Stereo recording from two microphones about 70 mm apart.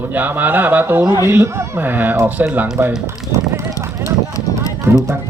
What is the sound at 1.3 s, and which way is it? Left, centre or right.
Speech, right.